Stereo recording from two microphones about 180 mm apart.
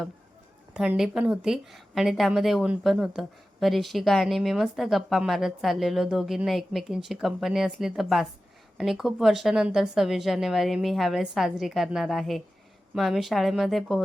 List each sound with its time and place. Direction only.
0.7 s a woman's voice: 5° right (ahead or behind)